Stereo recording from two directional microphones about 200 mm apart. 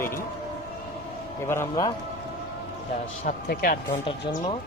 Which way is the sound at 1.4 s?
10° left (ahead or behind).